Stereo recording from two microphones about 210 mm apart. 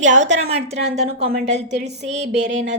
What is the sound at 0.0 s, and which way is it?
Speech, 35° right (ahead or behind).